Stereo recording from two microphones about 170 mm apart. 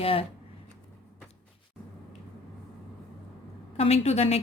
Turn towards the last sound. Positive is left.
turn(degrees=40)  # may be behind; listen again after turning